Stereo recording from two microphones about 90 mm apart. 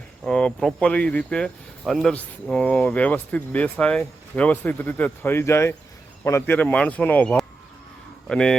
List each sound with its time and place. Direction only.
0.3 s speech: 10° left (ahead or behind)